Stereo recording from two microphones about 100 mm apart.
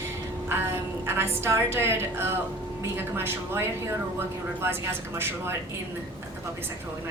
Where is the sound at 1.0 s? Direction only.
25° right (ahead or behind).